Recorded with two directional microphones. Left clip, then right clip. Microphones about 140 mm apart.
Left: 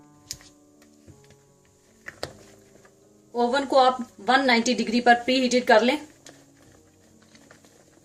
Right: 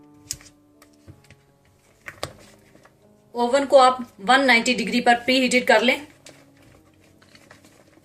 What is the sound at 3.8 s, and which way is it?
A woman's voice, 65° left (ahead or behind).